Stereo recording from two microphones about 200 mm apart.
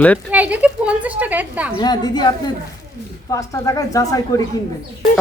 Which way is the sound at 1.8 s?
20° left (ahead or behind).